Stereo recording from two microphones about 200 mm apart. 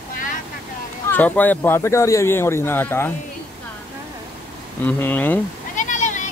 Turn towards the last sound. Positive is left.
turn(degrees=40)  # may be behind; listen again after turning